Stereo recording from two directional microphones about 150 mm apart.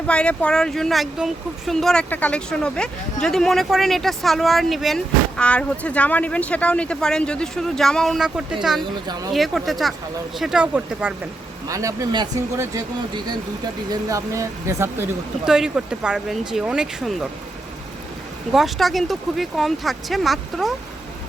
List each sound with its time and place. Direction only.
0.1 s speech: 5° left (ahead or behind)
8.8 s speech: 30° right (ahead or behind)
9.3 s speech: centre (ahead or behind)
11.7 s speech: 20° right (ahead or behind)
15.4 s speech: 5° right (ahead or behind)
18.5 s speech: centre (ahead or behind)